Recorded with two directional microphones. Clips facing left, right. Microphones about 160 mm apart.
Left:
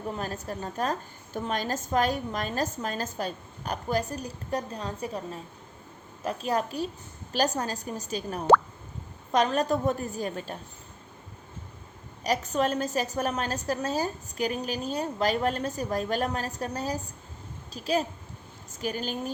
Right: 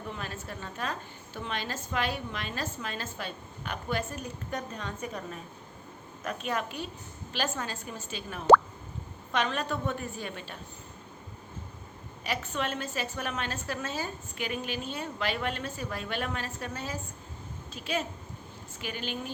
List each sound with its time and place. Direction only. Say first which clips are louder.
0.1 s a woman's voice: left 6 dB; 40° left (ahead or behind)
12.2 s a woman's voice: left 7 dB; 40° left (ahead or behind)